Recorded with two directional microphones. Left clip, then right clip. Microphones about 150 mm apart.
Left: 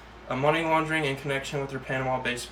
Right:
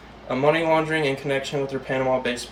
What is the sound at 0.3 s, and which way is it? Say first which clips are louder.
Speech: right 5 dB; 20° left (ahead or behind).